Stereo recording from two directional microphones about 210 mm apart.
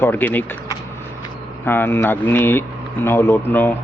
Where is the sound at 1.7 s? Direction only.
10° left (ahead or behind).